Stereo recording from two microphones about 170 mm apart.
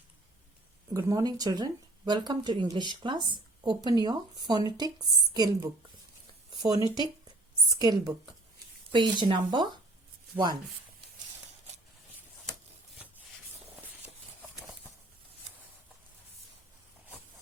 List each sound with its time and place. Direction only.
0.9 s speech: 20° right (ahead or behind)
6.5 s a sound: 25° right (ahead or behind)
6.8 s speech: 25° left (ahead or behind)
7.8 s speech: 25° right (ahead or behind)